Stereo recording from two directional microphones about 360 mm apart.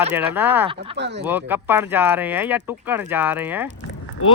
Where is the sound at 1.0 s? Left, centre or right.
Right.